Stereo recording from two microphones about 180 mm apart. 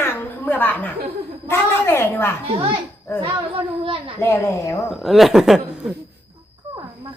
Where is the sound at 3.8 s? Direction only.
30° right (ahead or behind).